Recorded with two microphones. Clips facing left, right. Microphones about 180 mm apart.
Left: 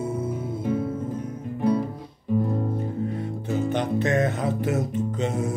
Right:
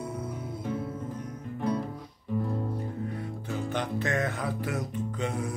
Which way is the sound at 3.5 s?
20° left (ahead or behind).